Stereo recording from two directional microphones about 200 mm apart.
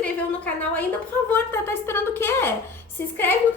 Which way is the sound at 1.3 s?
10° left (ahead or behind).